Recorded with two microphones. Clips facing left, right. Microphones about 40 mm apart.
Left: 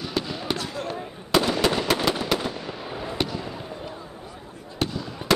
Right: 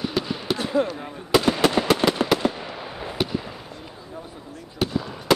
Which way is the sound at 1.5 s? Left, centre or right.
Centre.